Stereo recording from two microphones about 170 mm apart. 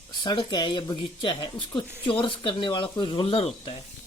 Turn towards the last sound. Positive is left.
turn(degrees=35)  # may be behind; listen again after turning